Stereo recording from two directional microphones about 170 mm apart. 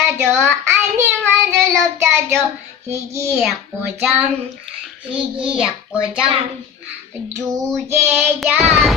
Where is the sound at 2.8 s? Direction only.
15° right (ahead or behind).